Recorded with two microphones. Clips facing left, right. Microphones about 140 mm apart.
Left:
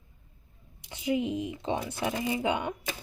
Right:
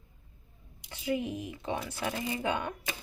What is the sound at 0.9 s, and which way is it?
Speech, 20° left (ahead or behind).